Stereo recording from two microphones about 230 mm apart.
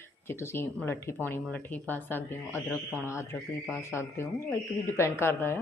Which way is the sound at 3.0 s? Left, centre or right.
Centre.